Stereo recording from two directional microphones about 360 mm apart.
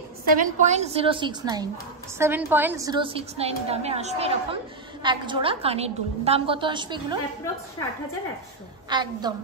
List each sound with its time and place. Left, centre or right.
0.4 s a woman's voice: centre
8.8 s a woman's voice: centre